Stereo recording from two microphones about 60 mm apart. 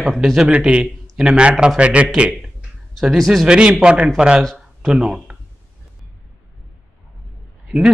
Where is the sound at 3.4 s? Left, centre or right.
Centre.